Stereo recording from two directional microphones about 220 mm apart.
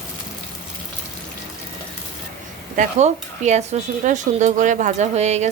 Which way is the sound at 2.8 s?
30° right (ahead or behind).